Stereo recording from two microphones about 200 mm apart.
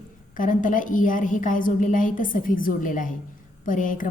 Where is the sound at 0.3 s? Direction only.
40° left (ahead or behind).